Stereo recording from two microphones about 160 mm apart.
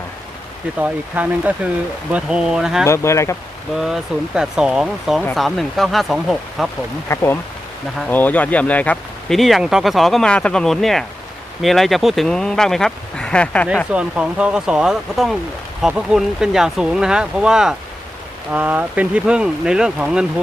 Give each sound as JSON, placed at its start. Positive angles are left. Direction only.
{"t": 0.8, "sound": "speech", "side_deg": -10}
{"t": 2.8, "sound": "speech", "side_deg": 15}
{"t": 3.8, "sound": "speech", "side_deg": -5}
{"t": 7.1, "sound": "speech", "side_deg": 15}
{"t": 13.9, "sound": "speech", "side_deg": -5}